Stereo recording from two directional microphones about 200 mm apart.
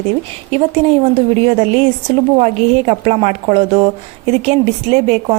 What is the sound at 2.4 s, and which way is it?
A woman's voice, 35° right (ahead or behind).